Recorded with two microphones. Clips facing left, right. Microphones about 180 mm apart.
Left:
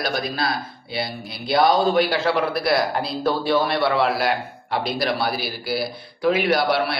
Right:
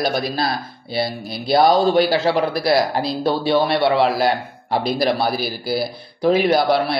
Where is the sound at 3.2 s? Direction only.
25° right (ahead or behind).